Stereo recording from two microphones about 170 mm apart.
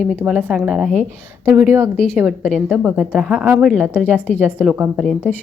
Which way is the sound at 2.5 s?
Centre (ahead or behind).